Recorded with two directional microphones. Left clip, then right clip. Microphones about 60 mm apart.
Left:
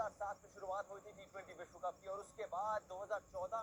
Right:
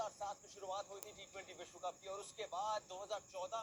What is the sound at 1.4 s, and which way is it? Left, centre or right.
Speech, centre.